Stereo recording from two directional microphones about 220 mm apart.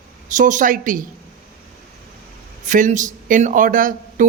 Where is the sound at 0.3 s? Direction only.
35° right (ahead or behind).